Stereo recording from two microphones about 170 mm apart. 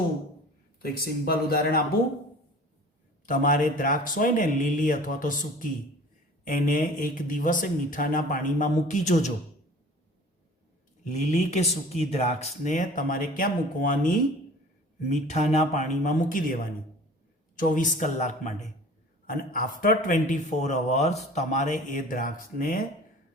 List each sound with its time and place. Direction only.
0.8 s speech: 60° left (ahead or behind)
3.2 s a man's voice: 50° left (ahead or behind)
11.0 s a man's voice: 45° left (ahead or behind)
15.1 s speech: 40° left (ahead or behind)
17.6 s a man's voice: 50° left (ahead or behind)